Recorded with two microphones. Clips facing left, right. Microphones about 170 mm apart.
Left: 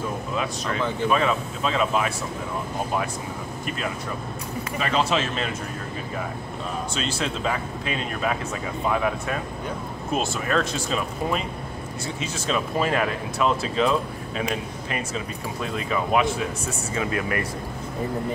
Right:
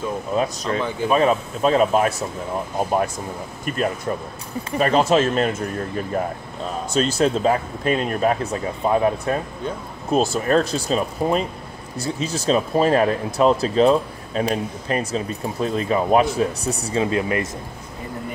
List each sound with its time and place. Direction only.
1.0 s speech: 35° right (ahead or behind)
3.6 s speech: 45° right (ahead or behind)
6.9 s speech: 45° right (ahead or behind); by 17.5 s 25° right (ahead or behind)